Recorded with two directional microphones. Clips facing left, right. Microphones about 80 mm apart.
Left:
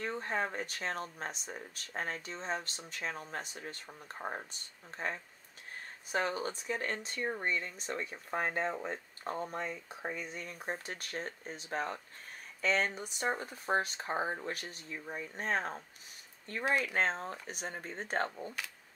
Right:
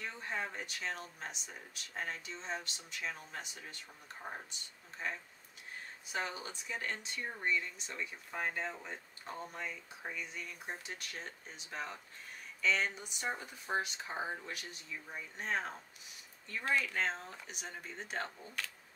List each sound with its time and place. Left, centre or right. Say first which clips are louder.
0.0 s speech: left 5 dB; left
6.1 s speech: left 6 dB; left
16.8 s speech: left 4 dB; left